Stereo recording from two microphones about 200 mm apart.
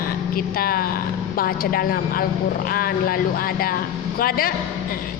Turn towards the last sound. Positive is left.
turn(degrees=45)  # may be behind; listen again after turning